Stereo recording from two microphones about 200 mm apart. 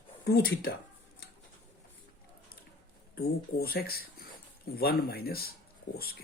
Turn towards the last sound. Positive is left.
turn(degrees=50)  # may be behind; listen again after turning